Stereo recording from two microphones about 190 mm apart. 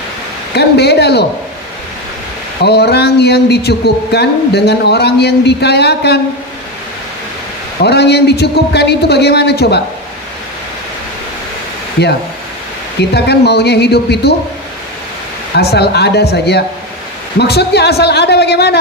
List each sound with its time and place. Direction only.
0.6 s speech: 60° left (ahead or behind)
2.6 s speech: 60° left (ahead or behind)
7.8 s speech: 60° left (ahead or behind)
13.0 s speech: 60° left (ahead or behind)
15.5 s speech: 60° left (ahead or behind)